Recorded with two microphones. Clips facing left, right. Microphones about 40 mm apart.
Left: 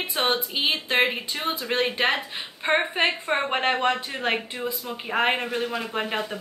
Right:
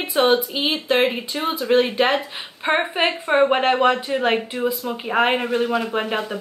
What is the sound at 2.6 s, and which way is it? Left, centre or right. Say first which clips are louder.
Speech: right 3 dB; centre.